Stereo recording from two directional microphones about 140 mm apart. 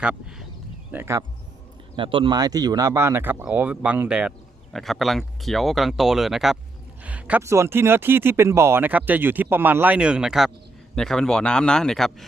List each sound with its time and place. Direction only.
0.0 s speech: 5° right (ahead or behind)
2.0 s a man's voice: 35° right (ahead or behind); by 12.1 s 5° left (ahead or behind)